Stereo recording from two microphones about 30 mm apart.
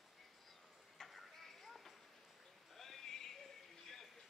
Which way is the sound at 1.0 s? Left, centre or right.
Centre.